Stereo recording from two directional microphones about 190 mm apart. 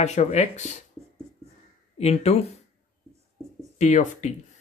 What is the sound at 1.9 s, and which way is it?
Speech, 35° left (ahead or behind).